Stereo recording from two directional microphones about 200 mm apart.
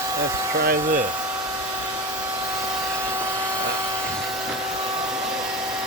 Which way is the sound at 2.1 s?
15° right (ahead or behind).